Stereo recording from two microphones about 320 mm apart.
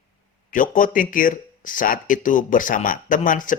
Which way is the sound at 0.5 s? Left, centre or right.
Left.